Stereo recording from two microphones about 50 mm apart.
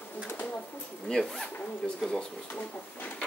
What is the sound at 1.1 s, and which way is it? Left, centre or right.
Speech, centre.